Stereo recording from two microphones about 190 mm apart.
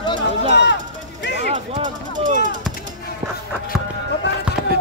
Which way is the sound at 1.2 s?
65° left (ahead or behind).